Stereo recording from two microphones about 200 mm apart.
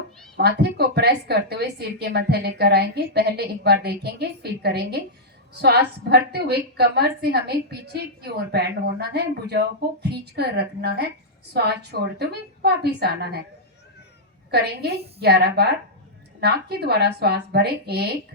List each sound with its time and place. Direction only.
0.3 s a woman's voice: 55° right (ahead or behind)
15.2 s a woman's voice: 55° right (ahead or behind)